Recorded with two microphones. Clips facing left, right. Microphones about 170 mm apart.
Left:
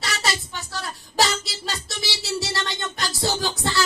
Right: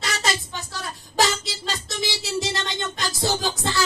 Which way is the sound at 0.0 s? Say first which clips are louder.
Right 1 dB; 20° right (ahead or behind).